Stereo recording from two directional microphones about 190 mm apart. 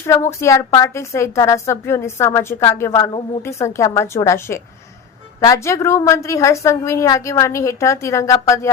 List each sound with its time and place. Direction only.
0.0 s a woman's voice: 15° left (ahead or behind)